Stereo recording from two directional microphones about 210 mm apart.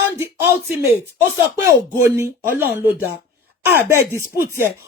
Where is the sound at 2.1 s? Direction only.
15° right (ahead or behind).